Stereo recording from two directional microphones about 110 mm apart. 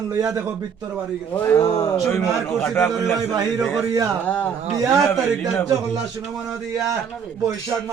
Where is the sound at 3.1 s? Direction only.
35° right (ahead or behind).